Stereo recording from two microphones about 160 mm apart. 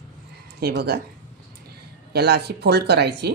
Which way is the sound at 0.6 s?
85° right.